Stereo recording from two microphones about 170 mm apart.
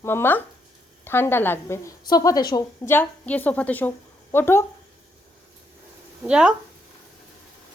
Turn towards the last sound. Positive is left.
turn(degrees=-5)  # may be behind; listen again after turning